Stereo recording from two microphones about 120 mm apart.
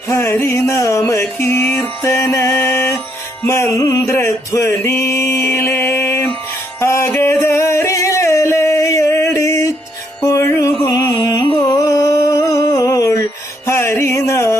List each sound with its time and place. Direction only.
0.1 s music: 20° left (ahead or behind)
11.7 s a sound: 30° left (ahead or behind)
13.7 s music: 20° left (ahead or behind)